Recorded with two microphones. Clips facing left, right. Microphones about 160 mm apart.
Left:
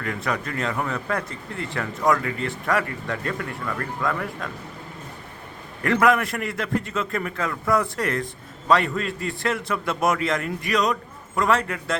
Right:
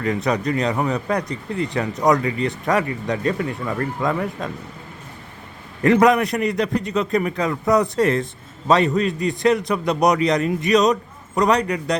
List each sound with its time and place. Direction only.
0.0 s a man's voice: 20° right (ahead or behind)
5.8 s a man's voice: 20° right (ahead or behind)